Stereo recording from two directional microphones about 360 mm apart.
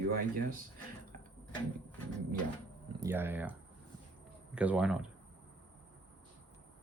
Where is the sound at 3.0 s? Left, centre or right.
Centre.